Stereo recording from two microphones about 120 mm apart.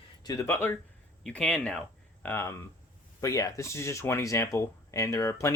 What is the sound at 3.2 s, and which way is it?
Speech, 30° left (ahead or behind).